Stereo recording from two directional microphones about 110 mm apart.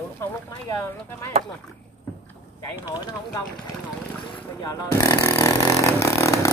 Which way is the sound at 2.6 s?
25° left (ahead or behind).